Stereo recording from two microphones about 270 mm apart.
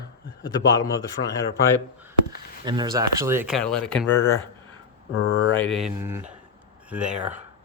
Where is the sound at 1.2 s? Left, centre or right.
Left.